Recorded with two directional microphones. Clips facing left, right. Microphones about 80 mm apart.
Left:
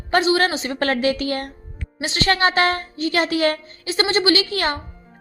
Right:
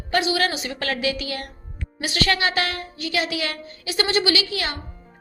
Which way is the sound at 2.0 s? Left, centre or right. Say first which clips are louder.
Left 3 dB; left.